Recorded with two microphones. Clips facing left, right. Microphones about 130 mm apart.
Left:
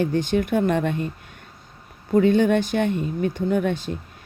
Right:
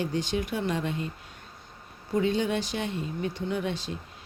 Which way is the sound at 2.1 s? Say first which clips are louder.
Left 9 dB; 55° left (ahead or behind).